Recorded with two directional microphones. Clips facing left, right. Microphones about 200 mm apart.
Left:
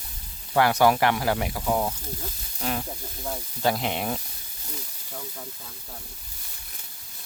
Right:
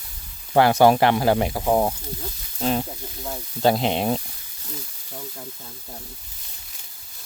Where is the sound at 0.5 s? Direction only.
30° right (ahead or behind).